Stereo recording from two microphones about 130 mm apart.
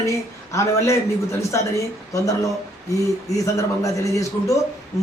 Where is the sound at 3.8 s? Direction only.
25° left (ahead or behind).